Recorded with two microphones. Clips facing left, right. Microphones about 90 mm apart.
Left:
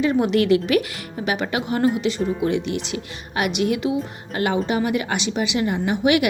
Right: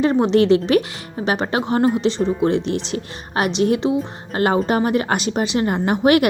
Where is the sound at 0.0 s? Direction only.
35° right (ahead or behind).